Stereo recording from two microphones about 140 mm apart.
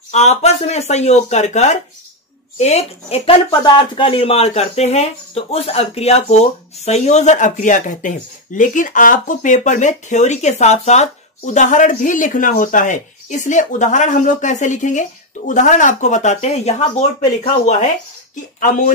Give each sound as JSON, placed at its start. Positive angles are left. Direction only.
{"t": 0.1, "sound": "speech", "side_deg": 50}
{"t": 18.3, "sound": "speech", "side_deg": 70}